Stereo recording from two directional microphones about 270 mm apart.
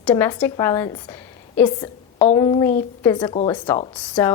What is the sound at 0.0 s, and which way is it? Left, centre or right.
A woman's voice, centre.